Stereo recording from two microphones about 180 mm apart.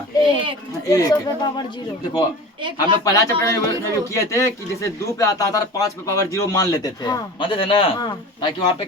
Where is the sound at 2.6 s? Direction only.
25° right (ahead or behind).